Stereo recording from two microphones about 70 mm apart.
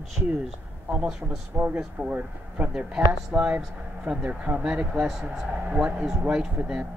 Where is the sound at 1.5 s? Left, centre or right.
Right.